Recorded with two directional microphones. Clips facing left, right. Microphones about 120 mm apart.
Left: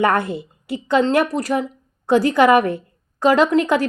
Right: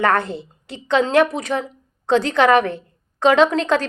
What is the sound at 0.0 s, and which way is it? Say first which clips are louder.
A woman's voice: left 1 dB; 10° left (ahead or behind).